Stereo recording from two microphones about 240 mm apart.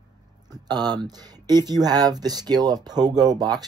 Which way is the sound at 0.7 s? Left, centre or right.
Centre.